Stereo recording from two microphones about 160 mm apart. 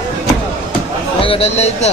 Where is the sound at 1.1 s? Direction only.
35° left (ahead or behind).